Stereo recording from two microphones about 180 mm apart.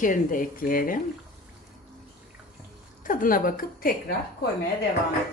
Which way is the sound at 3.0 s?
50° left (ahead or behind).